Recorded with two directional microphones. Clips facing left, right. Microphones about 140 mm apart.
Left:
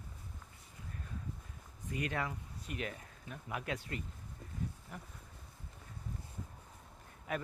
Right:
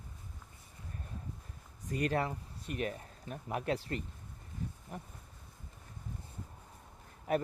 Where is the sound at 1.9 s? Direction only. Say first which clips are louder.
Right 5 dB; 35° right (ahead or behind).